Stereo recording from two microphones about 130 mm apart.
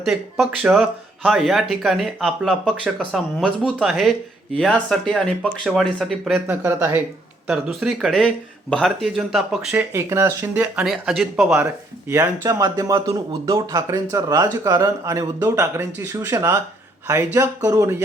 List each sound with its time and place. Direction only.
0.0 s speech: centre (ahead or behind)
6.5 s speech: 15° right (ahead or behind)
7.4 s speech: centre (ahead or behind)
9.7 s speech: 20° right (ahead or behind)
10.8 s speech: centre (ahead or behind)
11.5 s speech: 20° right (ahead or behind)